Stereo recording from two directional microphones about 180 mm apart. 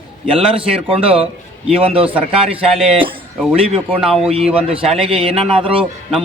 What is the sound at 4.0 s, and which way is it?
Speech, centre (ahead or behind).